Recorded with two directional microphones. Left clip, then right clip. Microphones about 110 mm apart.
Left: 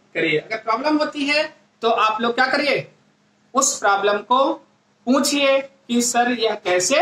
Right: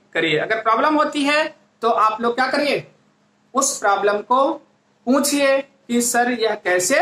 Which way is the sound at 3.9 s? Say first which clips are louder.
Right 1 dB; 35° right (ahead or behind).